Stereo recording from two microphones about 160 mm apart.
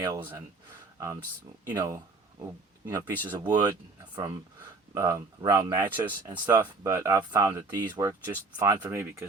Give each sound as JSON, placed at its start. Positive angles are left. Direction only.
{"t": 0.2, "sound": "speech", "side_deg": -15}